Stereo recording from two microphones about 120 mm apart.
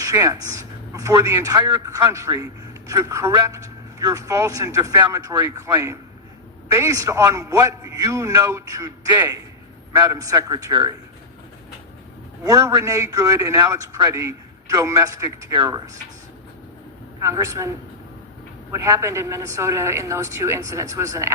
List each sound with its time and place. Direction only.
0.0 s a man's voice: 25° right (ahead or behind)
12.5 s a man's voice: 25° right (ahead or behind)
17.2 s a man's voice: 25° right (ahead or behind)